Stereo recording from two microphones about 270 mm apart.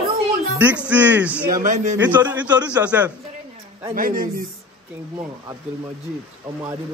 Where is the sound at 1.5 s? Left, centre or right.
Right.